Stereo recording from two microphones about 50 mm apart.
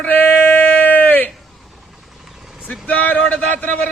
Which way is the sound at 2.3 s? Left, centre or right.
Centre.